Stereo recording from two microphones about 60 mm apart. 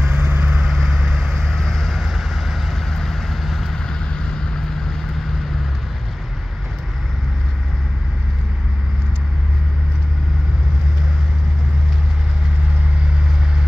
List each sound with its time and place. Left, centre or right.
0.0 s vehicle: right
0.7 s vehicle: centre